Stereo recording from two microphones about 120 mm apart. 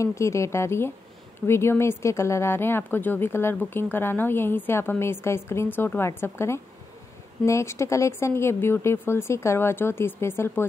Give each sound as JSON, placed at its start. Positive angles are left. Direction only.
{"t": 0.0, "sound": "speech", "side_deg": 25}